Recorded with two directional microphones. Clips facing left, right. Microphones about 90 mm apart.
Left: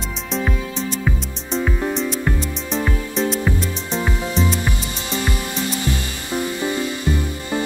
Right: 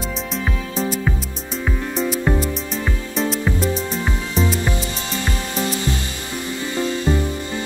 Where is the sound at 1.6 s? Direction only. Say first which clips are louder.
Right 1 dB; 5° right (ahead or behind).